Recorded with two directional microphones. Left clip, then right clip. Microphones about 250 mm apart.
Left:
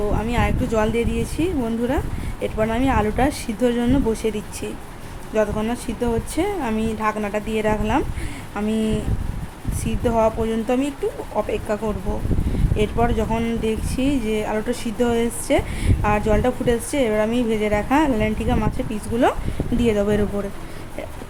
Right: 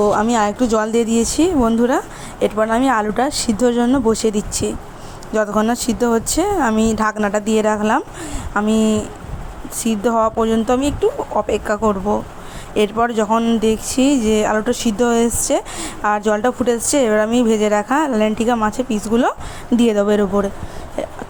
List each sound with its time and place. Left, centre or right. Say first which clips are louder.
0.1 s speech: right 8 dB; right